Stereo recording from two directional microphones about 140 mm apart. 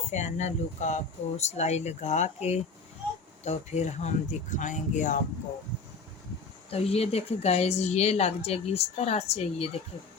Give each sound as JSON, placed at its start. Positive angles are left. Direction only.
{"t": 0.1, "sound": "speech", "side_deg": 55}
{"t": 6.7, "sound": "a woman's voice", "side_deg": 45}